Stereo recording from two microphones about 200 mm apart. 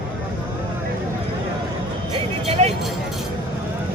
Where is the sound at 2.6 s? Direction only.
35° right (ahead or behind).